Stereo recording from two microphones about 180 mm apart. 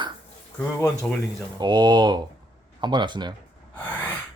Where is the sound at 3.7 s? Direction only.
10° left (ahead or behind).